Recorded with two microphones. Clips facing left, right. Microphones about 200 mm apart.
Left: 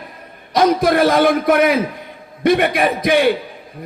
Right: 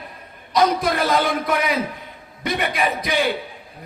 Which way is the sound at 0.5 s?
55° left (ahead or behind).